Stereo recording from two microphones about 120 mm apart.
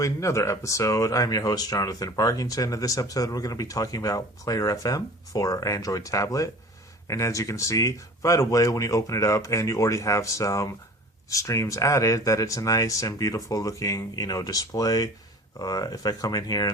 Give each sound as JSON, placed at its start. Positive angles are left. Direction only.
{"t": 0.0, "sound": "speech", "side_deg": 25}